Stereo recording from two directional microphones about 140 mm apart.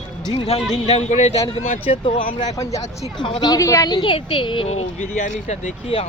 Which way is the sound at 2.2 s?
60° left (ahead or behind).